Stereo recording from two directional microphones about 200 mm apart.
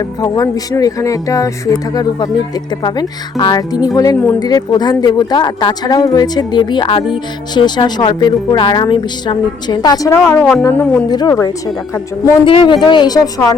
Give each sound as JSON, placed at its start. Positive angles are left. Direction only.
{"t": 0.2, "sound": "speech", "side_deg": 20}
{"t": 2.8, "sound": "a woman's voice", "side_deg": 20}